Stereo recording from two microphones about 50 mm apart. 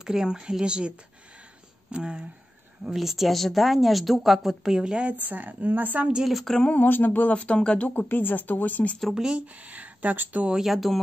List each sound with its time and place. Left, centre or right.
0.0 s a woman's voice: centre
2.9 s speech: centre
5.1 s speech: right
6.4 s speech: centre
6.7 s speech: left; by 7.9 s centre
7.9 s speech: left
9.1 s a woman's voice: centre
9.5 s speech: right
10.5 s speech: centre